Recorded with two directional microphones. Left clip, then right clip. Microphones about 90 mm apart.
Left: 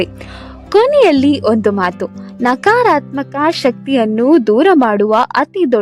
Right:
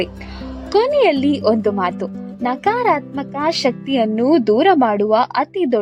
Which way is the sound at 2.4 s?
55° left (ahead or behind).